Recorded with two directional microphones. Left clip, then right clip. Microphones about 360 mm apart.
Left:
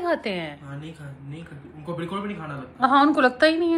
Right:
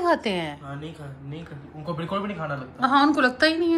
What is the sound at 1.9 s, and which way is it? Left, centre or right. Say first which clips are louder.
Speech: right 2 dB; right.